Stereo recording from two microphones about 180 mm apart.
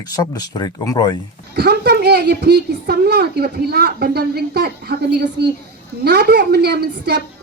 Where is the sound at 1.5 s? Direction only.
65° right (ahead or behind).